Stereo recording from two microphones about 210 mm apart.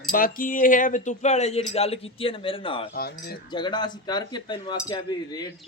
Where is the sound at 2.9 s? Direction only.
45° left (ahead or behind).